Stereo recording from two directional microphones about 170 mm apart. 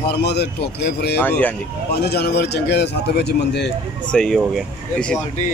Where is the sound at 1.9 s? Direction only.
70° left (ahead or behind).